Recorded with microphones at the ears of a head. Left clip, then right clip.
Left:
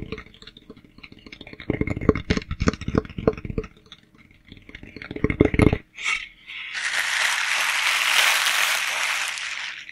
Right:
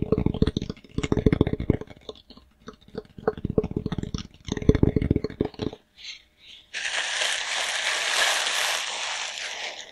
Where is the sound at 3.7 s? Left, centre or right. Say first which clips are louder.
Right 15 dB; right.